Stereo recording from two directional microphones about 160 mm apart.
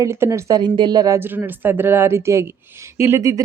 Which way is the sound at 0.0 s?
15° right (ahead or behind).